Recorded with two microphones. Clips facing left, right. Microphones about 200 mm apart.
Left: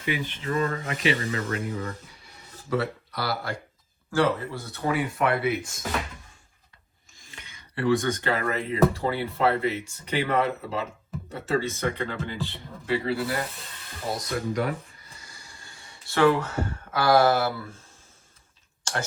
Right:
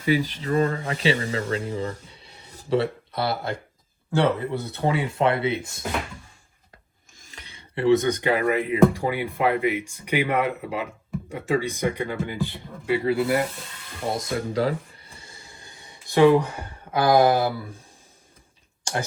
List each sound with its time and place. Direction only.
0.0 s speech: 35° right (ahead or behind)
2.0 s music: 25° right (ahead or behind)
4.2 s speech: 60° right (ahead or behind)
4.7 s speech: 25° right (ahead or behind)
7.2 s cutlery: 40° right (ahead or behind)
7.8 s speech: 20° right (ahead or behind)
14.2 s speech: 30° right (ahead or behind)
18.9 s speech: 15° right (ahead or behind)